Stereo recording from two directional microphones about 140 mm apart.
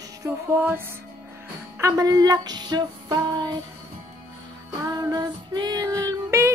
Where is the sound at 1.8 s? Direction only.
25° right (ahead or behind).